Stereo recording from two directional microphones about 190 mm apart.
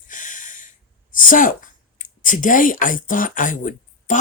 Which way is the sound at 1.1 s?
45° left (ahead or behind).